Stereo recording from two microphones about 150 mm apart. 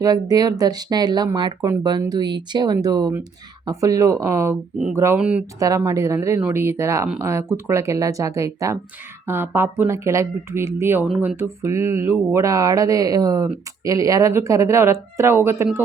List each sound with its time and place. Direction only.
0.0 s speech: 25° right (ahead or behind)